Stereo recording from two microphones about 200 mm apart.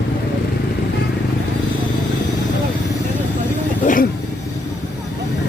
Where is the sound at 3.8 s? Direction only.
45° left (ahead or behind).